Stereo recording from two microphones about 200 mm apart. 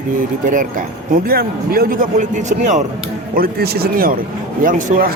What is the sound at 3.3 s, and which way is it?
A man's voice, 50° right (ahead or behind).